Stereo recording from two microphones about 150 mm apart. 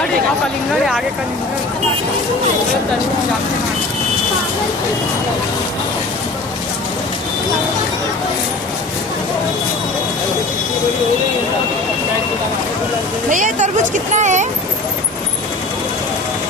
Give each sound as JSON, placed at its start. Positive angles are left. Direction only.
{"t": 13.3, "sound": "speech", "side_deg": -60}